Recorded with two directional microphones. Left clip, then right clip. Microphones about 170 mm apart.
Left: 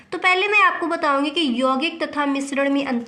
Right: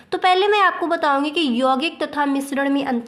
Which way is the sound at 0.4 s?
40° right (ahead or behind).